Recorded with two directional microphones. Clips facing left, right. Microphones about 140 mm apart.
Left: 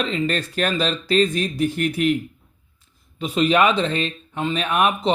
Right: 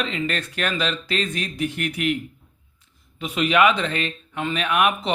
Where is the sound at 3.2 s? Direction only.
35° left (ahead or behind).